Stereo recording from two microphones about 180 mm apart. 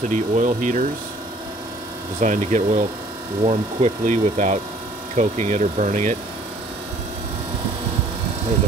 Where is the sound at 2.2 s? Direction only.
45° right (ahead or behind).